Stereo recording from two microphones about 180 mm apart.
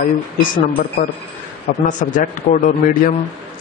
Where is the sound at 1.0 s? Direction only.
40° left (ahead or behind).